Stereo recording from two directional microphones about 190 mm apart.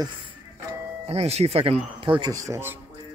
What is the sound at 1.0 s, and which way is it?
Speech, 35° right (ahead or behind).